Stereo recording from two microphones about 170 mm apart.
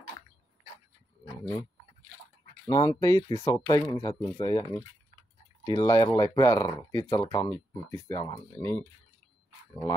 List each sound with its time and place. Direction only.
1.2 s livestock: 15° left (ahead or behind)
2.6 s speech: 20° left (ahead or behind)